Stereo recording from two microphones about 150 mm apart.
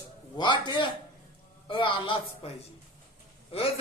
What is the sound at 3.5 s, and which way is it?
Speech, 40° left (ahead or behind).